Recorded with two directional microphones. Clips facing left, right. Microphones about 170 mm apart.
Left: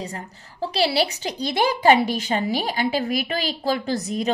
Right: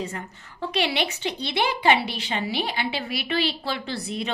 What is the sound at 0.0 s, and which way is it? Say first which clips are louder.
A woman's voice: right 1 dB; 35° left (ahead or behind).